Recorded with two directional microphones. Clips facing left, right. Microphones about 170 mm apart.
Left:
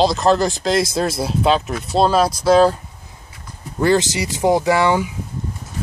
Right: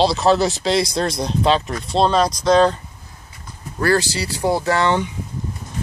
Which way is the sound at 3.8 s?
20° left (ahead or behind).